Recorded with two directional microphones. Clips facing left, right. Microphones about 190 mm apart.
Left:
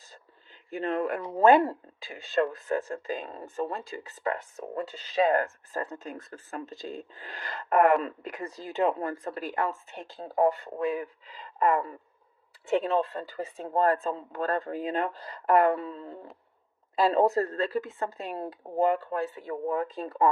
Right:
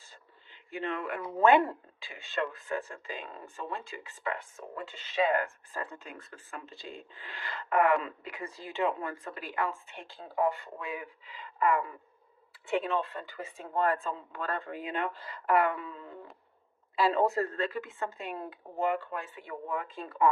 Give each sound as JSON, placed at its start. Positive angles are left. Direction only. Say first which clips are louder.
{"t": 0.7, "sound": "speech", "louder": "left 6 dB", "side_deg": 40}